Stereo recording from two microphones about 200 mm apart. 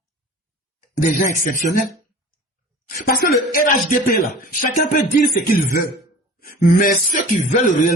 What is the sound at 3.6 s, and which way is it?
A man's voice, 45° left (ahead or behind).